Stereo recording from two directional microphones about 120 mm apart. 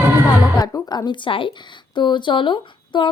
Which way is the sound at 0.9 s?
35° left (ahead or behind).